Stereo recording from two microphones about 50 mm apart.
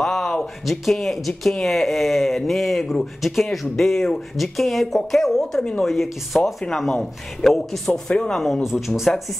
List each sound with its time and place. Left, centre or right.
0.0 s a sound: centre
0.7 s speech: centre
8.1 s speech: centre
8.6 s speech: centre